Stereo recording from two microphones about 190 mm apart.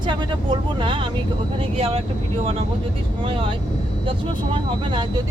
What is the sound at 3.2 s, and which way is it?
Speech, 25° right (ahead or behind).